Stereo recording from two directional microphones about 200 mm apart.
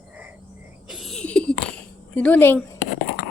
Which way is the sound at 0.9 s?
Centre (ahead or behind).